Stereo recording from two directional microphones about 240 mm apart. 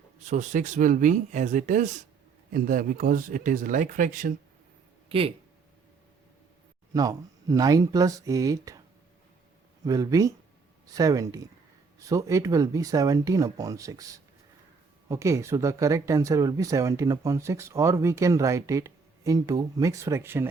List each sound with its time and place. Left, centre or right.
0.3 s speech: right
5.0 s speech: right
6.9 s speech: centre
9.8 s speech: centre